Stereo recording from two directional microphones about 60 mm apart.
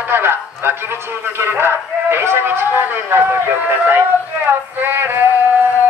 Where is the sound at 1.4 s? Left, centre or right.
Right.